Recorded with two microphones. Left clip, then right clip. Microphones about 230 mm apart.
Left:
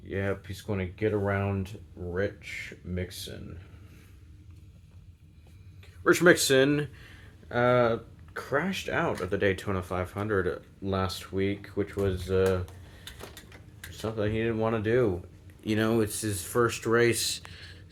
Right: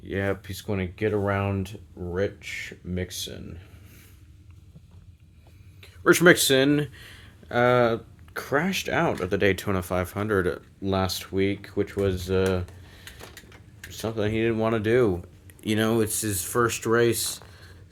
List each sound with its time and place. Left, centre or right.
0.1 s speech: right
5.8 s speech: right
7.0 s speech: right
15.6 s speech: right